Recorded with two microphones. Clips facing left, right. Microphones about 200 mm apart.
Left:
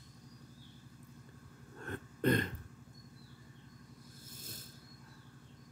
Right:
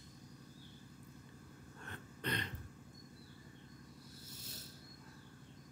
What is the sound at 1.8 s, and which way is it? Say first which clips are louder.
Throat clearing: left 12 dB; 50° left (ahead or behind).